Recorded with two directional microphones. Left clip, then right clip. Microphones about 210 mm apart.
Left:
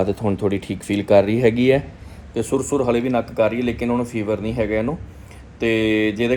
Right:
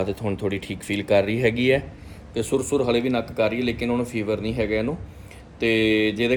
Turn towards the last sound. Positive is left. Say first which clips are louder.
# left 1 dB
turn(degrees=-10)  # may be behind; listen again after turning